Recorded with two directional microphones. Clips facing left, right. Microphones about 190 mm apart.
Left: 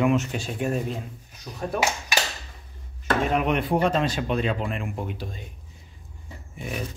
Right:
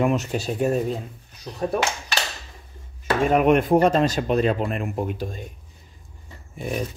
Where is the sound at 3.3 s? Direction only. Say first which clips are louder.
Right 9 dB; 50° right (ahead or behind).